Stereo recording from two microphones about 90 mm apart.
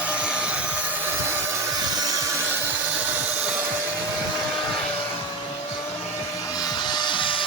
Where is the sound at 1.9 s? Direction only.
45° right (ahead or behind).